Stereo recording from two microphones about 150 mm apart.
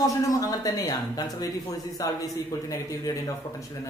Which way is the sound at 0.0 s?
25° left (ahead or behind).